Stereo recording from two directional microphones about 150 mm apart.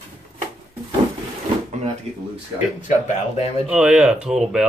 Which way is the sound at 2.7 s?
55° left (ahead or behind).